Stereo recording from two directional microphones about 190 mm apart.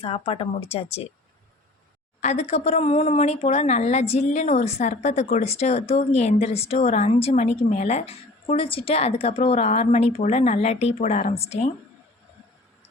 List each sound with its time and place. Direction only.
0.0 s a woman's voice: 30° left (ahead or behind)
2.2 s a woman's voice: 35° left (ahead or behind)